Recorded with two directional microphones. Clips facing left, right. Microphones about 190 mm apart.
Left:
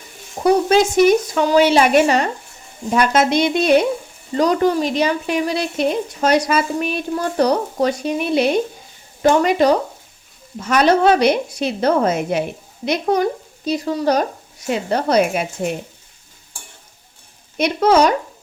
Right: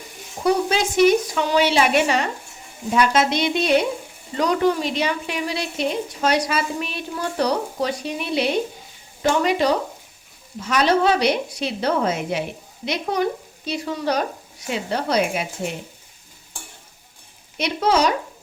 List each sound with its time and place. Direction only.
0.4 s a woman's voice: 50° left (ahead or behind)
13.7 s stir: 40° left (ahead or behind)
14.7 s a woman's voice: 50° left (ahead or behind)
17.6 s a woman's voice: 55° left (ahead or behind)